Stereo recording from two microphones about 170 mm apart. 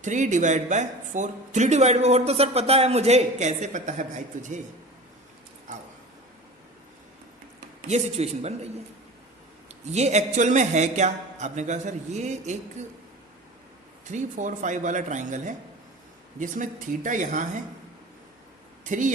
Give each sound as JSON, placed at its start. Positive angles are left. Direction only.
{"t": 0.0, "sound": "speech", "side_deg": -45}
{"t": 7.9, "sound": "a man's voice", "side_deg": -40}
{"t": 9.8, "sound": "speech", "side_deg": -40}
{"t": 14.0, "sound": "speech", "side_deg": -45}
{"t": 18.9, "sound": "speech", "side_deg": -50}